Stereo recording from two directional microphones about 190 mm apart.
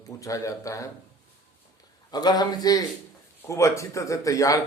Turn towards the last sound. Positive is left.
turn(degrees=15)  # may be behind; listen again after turning